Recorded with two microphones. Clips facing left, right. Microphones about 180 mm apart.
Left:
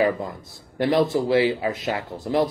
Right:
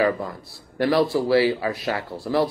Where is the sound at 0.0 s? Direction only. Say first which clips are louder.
Even; 20° left (ahead or behind).